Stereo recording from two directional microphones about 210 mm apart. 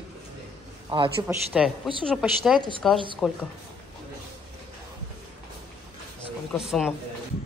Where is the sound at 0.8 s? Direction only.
25° right (ahead or behind).